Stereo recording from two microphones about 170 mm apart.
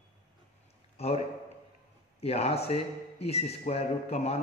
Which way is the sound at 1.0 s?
40° left (ahead or behind).